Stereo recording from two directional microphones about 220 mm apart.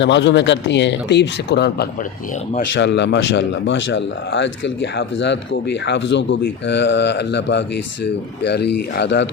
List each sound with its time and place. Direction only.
0.0 s speech: 55° left (ahead or behind)